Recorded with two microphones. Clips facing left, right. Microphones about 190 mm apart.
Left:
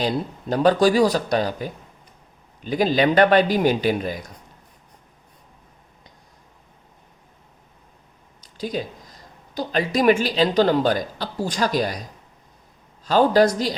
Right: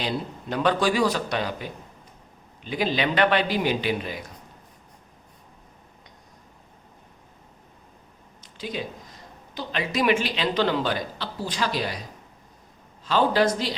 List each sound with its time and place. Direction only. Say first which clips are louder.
0.0 s a man's voice: left 5 dB; 40° left (ahead or behind)
8.5 s speech: left 5 dB; 40° left (ahead or behind)
13.1 s speech: left 5 dB; 40° left (ahead or behind)